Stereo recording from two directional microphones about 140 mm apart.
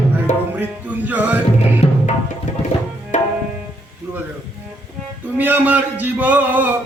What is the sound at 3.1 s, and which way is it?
Tabla, 60° left (ahead or behind).